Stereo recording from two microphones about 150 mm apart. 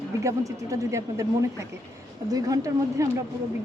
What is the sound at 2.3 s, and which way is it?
Speech, 25° right (ahead or behind).